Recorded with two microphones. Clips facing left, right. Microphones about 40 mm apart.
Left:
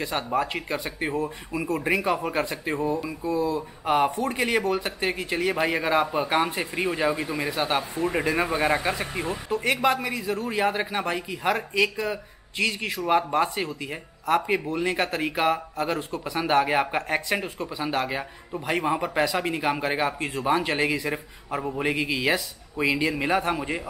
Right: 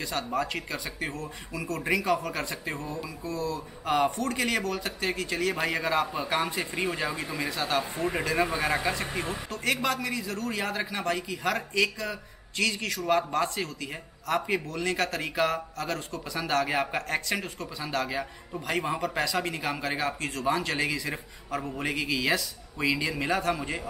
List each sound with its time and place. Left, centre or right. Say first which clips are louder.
0.0 s speech: left 4 dB; left
7.5 s speech: left 3 dB; left
7.9 s speech: left 3 dB; centre
8.2 s speech: left 3 dB; centre